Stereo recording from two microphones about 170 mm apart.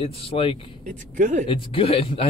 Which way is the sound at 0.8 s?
45° right (ahead or behind).